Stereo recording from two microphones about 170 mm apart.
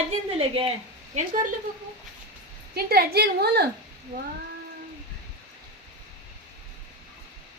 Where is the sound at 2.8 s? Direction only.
65° right (ahead or behind).